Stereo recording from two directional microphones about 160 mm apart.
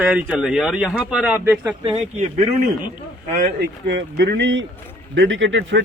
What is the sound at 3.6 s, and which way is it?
Speech, 90° right.